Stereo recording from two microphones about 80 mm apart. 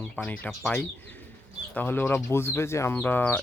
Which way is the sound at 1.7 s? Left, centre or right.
Left.